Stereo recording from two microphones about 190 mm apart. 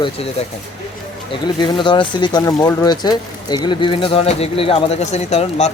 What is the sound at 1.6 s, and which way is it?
Speech, 25° left (ahead or behind).